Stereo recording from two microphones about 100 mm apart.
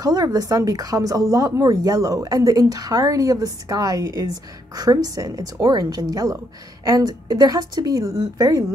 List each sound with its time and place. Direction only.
0.0 s speech: 40° right (ahead or behind)